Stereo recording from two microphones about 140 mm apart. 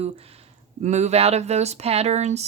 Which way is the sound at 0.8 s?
55° right (ahead or behind).